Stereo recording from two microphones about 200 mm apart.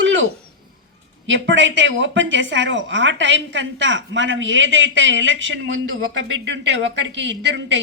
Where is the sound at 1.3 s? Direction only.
65° right (ahead or behind).